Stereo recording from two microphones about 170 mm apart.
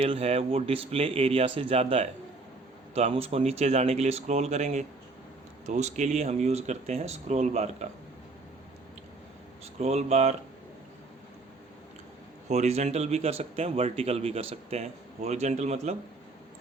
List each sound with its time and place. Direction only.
0.0 s a man's voice: 35° right (ahead or behind)
9.7 s a man's voice: 40° right (ahead or behind)
12.5 s a man's voice: 40° right (ahead or behind)